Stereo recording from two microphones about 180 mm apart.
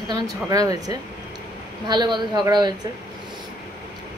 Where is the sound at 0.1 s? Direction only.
20° right (ahead or behind).